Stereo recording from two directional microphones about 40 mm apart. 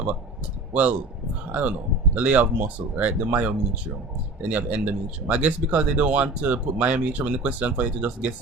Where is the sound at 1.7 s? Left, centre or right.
Right.